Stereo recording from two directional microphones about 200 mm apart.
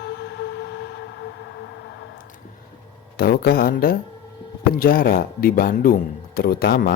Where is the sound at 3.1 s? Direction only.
50° left (ahead or behind).